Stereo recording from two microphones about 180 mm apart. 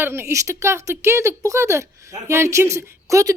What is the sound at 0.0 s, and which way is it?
Speech, 15° right (ahead or behind).